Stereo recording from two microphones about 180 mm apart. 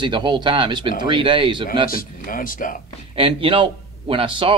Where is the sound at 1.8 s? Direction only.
50° left (ahead or behind).